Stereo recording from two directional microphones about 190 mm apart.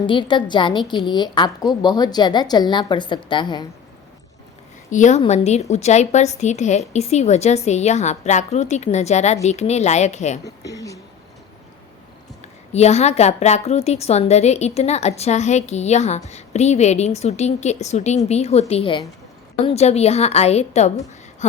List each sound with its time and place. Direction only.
0.0 s a woman's voice: 25° left (ahead or behind)
4.9 s a woman's voice: 40° left (ahead or behind)
10.4 s speech: 20° left (ahead or behind)
12.7 s a woman's voice: 35° left (ahead or behind)